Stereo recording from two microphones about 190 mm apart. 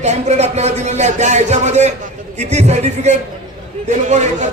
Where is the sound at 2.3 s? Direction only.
35° right (ahead or behind).